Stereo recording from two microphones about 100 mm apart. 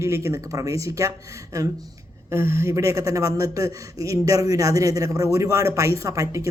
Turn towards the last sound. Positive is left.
turn(degrees=-35)  # may be behind; listen again after turning